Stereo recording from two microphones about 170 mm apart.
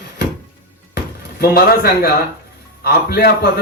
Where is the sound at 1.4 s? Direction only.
65° left (ahead or behind).